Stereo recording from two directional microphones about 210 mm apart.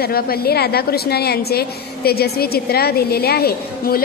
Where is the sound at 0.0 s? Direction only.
45° left (ahead or behind).